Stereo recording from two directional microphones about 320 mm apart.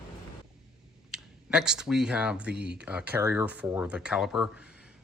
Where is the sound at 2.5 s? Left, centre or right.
Right.